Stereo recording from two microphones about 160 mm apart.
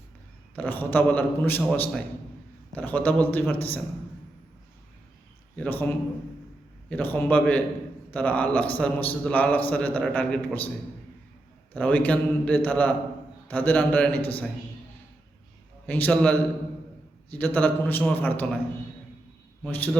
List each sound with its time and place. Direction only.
0.5 s a man's voice: 10° left (ahead or behind)
5.5 s a man's voice: 10° left (ahead or behind)
6.9 s a man's voice: 10° left (ahead or behind)
11.7 s a man's voice: 10° left (ahead or behind)
15.9 s a man's voice: 10° left (ahead or behind)
19.6 s a man's voice: 10° left (ahead or behind)